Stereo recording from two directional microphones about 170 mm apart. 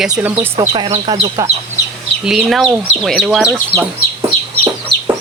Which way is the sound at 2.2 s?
Centre (ahead or behind).